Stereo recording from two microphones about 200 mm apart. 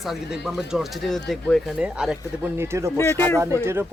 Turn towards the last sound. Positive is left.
turn(degrees=-10)  # may be behind; listen again after turning